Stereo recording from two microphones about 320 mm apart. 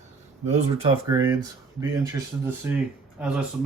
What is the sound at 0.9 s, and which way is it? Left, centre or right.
Speech, centre.